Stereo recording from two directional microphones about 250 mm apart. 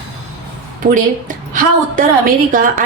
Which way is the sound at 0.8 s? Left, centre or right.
Right.